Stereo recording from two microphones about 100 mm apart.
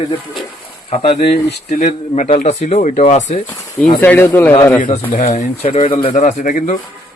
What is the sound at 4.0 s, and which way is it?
Speech, 20° left (ahead or behind).